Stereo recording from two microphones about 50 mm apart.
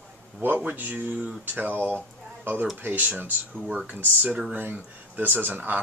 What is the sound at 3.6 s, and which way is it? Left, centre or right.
Speech, right.